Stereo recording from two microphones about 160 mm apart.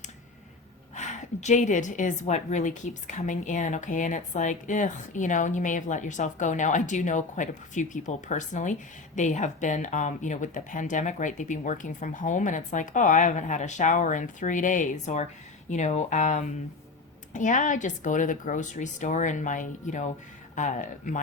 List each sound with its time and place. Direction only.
0.9 s a woman's voice: 50° left (ahead or behind)